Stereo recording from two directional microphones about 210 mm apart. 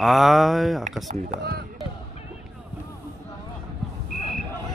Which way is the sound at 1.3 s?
50° right (ahead or behind).